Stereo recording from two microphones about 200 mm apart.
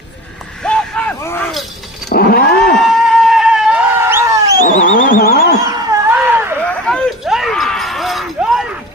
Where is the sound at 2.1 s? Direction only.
50° left (ahead or behind).